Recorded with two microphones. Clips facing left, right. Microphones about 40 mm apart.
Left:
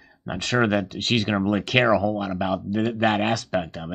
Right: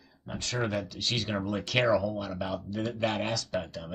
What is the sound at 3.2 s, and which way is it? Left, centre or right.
Speech, left.